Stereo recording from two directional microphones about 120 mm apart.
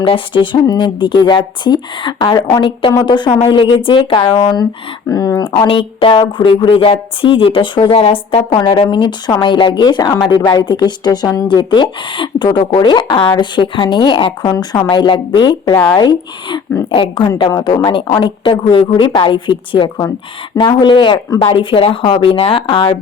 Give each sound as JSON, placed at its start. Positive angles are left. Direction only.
{"t": 0.0, "sound": "a woman's voice", "side_deg": 50}
{"t": 0.5, "sound": "speech", "side_deg": 40}
{"t": 5.1, "sound": "speech", "side_deg": 30}
{"t": 5.5, "sound": "a woman's voice", "side_deg": 45}
{"t": 8.4, "sound": "a woman's voice", "side_deg": 40}